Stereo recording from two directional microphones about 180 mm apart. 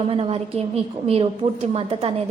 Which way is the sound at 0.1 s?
30° right (ahead or behind).